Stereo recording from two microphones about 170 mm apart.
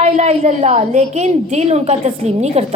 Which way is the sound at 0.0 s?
40° right (ahead or behind).